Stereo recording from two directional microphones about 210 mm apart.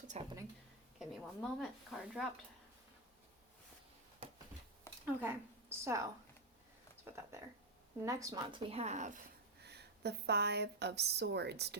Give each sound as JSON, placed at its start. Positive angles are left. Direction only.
{"t": 0.1, "sound": "speech", "side_deg": -30}
{"t": 0.9, "sound": "a woman's voice", "side_deg": 0}
{"t": 4.2, "sound": "a sound", "side_deg": -25}
{"t": 5.0, "sound": "a woman's voice", "side_deg": -10}
{"t": 8.0, "sound": "speech", "side_deg": -15}
{"t": 9.6, "sound": "a woman's voice", "side_deg": -50}